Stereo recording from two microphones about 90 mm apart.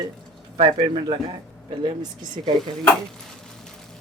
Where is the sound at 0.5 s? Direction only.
80° right.